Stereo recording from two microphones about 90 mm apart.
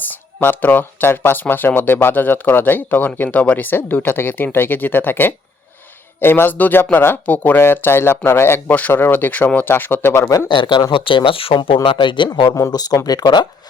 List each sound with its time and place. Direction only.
0.0 s speech: 20° left (ahead or behind)
10.5 s speech: 60° left (ahead or behind)
12.5 s speech: 40° left (ahead or behind)